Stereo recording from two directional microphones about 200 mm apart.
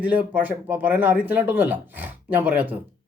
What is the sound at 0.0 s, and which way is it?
Speech, 5° right (ahead or behind).